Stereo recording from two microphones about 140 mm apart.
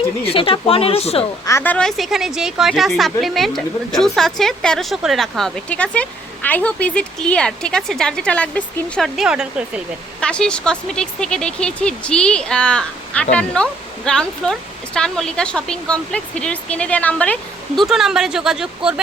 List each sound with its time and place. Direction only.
0.3 s speech: 40° left (ahead or behind)
1.5 s a woman's voice: 20° left (ahead or behind)
1.7 s speech: 5° left (ahead or behind)
9.1 s speech: 5° right (ahead or behind)
10.2 s speech: 5° left (ahead or behind)
17.8 s speech: 5° right (ahead or behind)